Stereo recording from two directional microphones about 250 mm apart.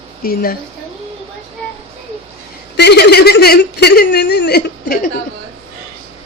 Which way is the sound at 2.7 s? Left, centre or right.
Left.